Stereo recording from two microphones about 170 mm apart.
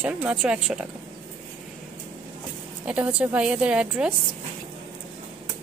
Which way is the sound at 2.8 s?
5° right (ahead or behind).